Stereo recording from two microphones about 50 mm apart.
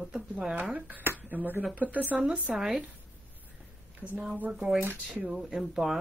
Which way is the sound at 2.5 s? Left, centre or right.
Centre.